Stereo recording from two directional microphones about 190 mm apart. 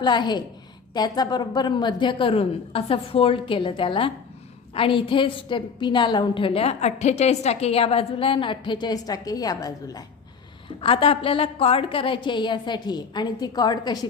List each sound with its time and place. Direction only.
0.0 s a woman's voice: 25° left (ahead or behind)